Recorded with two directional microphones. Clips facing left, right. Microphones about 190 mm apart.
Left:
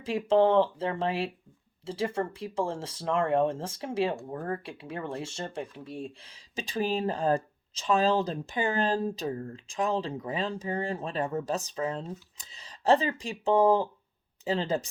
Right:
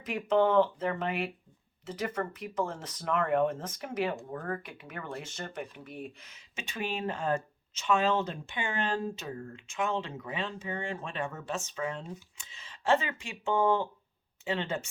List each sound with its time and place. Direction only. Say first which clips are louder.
0.0 s speech: left 3 dB; 30° left (ahead or behind)